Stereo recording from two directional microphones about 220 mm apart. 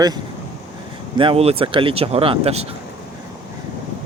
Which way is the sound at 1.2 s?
25° right (ahead or behind).